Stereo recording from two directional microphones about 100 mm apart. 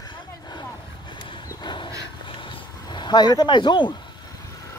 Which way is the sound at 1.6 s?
50° left (ahead or behind).